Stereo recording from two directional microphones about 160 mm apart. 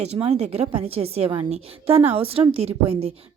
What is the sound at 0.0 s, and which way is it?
A woman's voice, 40° right (ahead or behind).